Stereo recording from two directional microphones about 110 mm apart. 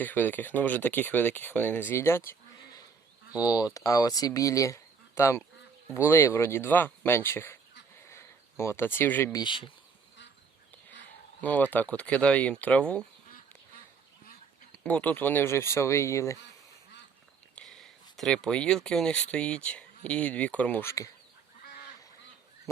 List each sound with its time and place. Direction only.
0.0 s speech: 15° left (ahead or behind)
3.3 s speech: 35° left (ahead or behind)
8.0 s a sound: 25° left (ahead or behind)
9.3 s speech: 45° left (ahead or behind)
11.3 s speech: 15° left (ahead or behind)
14.8 s speech: 15° left (ahead or behind)
17.5 s speech: 5° left (ahead or behind)
20.8 s speech: 30° left (ahead or behind)